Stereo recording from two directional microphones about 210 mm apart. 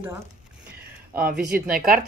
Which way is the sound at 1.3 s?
40° right (ahead or behind).